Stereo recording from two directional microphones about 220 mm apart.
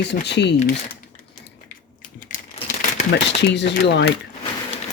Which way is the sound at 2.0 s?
35° left (ahead or behind).